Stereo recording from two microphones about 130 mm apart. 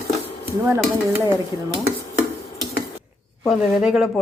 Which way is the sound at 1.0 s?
20° right (ahead or behind).